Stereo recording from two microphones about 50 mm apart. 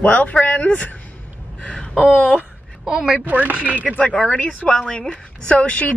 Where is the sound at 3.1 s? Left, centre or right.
Right.